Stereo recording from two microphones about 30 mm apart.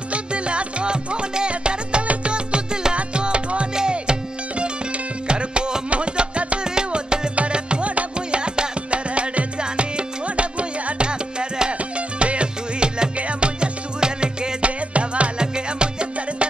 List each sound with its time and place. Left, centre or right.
0.1 s music: right
6.6 s music: right
9.6 s music: right
12.2 s music: right
14.6 s music: right
15.3 s music: right